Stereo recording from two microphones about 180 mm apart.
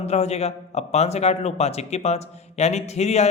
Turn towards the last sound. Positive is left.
turn(degrees=35)  # may be behind; listen again after turning